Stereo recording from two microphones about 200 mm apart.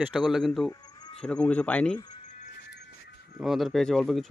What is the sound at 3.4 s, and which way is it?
Speech, centre (ahead or behind).